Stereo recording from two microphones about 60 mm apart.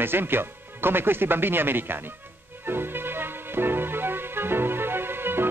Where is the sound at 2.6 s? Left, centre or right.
Right.